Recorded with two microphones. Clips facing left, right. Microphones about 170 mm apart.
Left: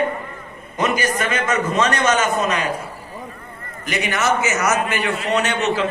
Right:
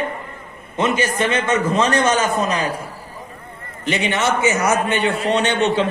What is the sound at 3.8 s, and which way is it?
A man's voice, 30° right (ahead or behind).